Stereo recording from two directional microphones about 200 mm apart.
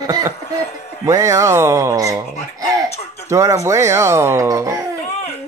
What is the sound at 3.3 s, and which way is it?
Speech, 15° right (ahead or behind).